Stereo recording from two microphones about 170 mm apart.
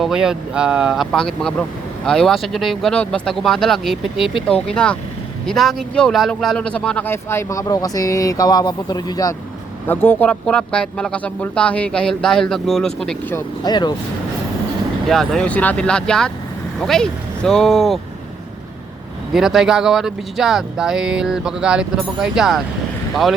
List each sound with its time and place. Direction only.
0.0 s a man's voice: 5° right (ahead or behind); by 9.3 s 25° left (ahead or behind)
9.8 s a man's voice: 10° left (ahead or behind)
13.3 s speech: 25° left (ahead or behind)
15.0 s a man's voice: centre (ahead or behind)
19.3 s a man's voice: centre (ahead or behind)